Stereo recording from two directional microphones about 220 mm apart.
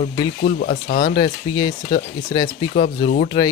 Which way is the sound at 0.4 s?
40° left (ahead or behind).